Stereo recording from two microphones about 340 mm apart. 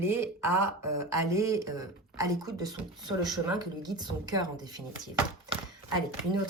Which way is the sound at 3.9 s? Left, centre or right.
Centre.